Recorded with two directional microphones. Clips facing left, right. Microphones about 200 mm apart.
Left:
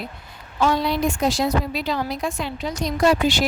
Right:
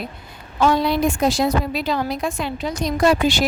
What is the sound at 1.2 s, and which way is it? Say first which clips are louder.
A woman's voice: right 2 dB; 55° right (ahead or behind).